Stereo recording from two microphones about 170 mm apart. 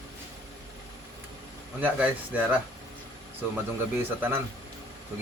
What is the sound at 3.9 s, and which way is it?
Speech, 15° right (ahead or behind).